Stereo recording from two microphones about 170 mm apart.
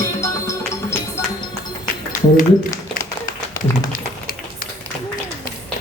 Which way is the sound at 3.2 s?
20° left (ahead or behind).